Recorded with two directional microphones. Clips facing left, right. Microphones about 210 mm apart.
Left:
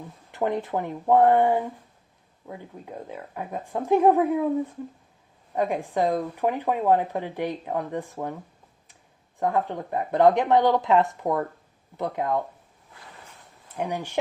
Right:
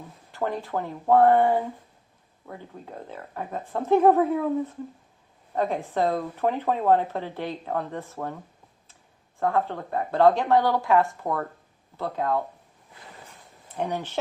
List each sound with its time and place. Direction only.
0.3 s speech: 20° left (ahead or behind)
5.5 s speech: 15° left (ahead or behind)
9.4 s speech: 15° left (ahead or behind)
13.7 s speech: 10° left (ahead or behind)